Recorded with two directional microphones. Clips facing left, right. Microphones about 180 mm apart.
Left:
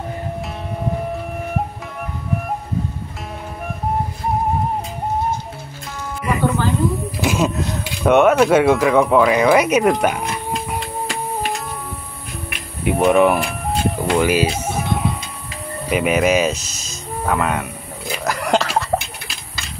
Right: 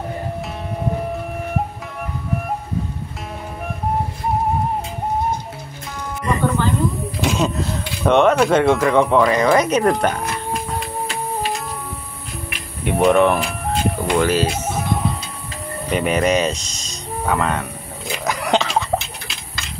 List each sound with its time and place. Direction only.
6.2 s music: 10° left (ahead or behind)
7.2 s speech: 5° left (ahead or behind)
12.8 s speech: centre (ahead or behind)
14.7 s music: 10° left (ahead or behind)
15.9 s speech: 5° left (ahead or behind)
18.1 s a sound: centre (ahead or behind)